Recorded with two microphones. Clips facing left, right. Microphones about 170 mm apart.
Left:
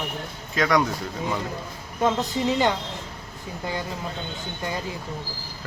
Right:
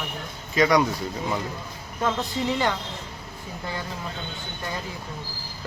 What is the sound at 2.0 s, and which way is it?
Speech, 20° left (ahead or behind).